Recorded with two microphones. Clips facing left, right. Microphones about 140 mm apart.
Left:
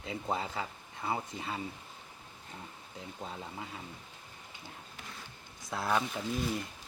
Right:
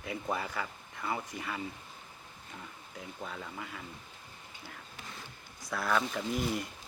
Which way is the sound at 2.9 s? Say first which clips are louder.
Right 1 dB; 25° left (ahead or behind).